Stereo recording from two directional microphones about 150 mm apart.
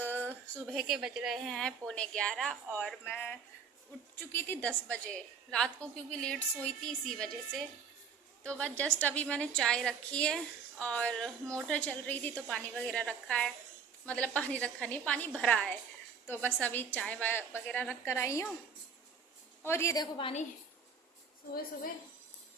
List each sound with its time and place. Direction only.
0.0 s a sound: 15° left (ahead or behind)
0.6 s a woman's voice: centre (ahead or behind); by 18.4 s 20° left (ahead or behind)
19.6 s a woman's voice: 20° left (ahead or behind)